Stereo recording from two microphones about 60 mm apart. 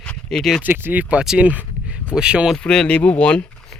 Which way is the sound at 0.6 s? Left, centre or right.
Right.